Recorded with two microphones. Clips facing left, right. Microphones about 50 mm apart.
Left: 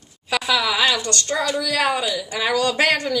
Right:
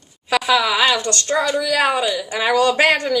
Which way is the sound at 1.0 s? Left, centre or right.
Right.